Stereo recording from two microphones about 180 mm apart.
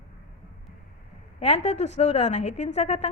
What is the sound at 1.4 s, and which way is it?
A woman's voice, 35° left (ahead or behind).